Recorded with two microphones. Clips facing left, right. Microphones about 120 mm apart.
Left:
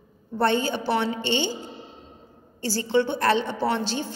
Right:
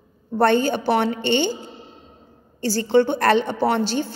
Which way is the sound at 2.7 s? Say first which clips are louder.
Right 5 dB; 50° right (ahead or behind).